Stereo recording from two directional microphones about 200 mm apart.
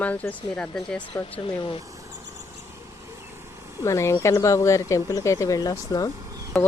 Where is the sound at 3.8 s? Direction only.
15° left (ahead or behind).